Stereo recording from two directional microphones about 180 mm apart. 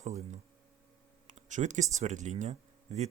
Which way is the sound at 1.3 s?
40° right (ahead or behind).